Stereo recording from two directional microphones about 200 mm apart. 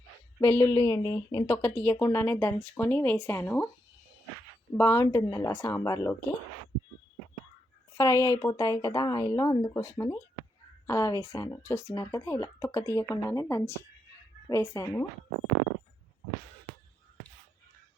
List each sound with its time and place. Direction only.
0.3 s speech: 10° left (ahead or behind)
4.8 s speech: 10° left (ahead or behind)
7.9 s speech: 15° left (ahead or behind)